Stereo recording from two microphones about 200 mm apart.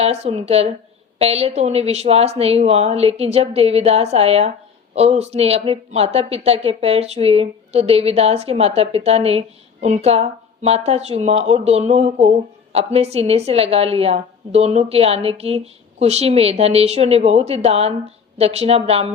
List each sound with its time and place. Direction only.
0.0 s a woman's voice: 30° right (ahead or behind)